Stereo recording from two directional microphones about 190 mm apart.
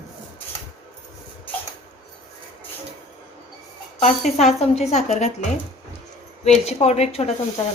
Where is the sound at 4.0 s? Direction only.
35° left (ahead or behind).